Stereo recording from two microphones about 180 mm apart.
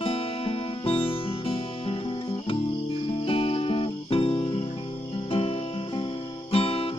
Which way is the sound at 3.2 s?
30° left (ahead or behind).